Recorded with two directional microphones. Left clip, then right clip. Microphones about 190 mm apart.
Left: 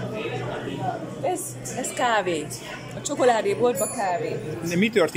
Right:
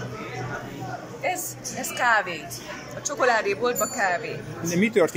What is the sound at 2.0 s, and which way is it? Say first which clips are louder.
A woman's voice: right 1 dB; 25° left (ahead or behind).